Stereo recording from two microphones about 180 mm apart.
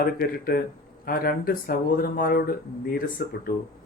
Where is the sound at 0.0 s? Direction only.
55° left (ahead or behind).